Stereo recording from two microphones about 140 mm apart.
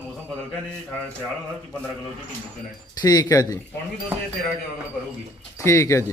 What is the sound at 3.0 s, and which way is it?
Speech, 25° left (ahead or behind).